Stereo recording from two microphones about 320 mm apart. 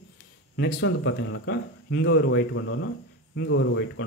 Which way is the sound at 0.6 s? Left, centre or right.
Left.